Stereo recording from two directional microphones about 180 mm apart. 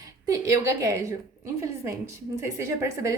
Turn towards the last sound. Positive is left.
turn(degrees=-15)  # may be behind; listen again after turning